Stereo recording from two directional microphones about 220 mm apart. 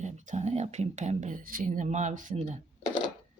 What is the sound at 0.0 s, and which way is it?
Speech, 35° right (ahead or behind).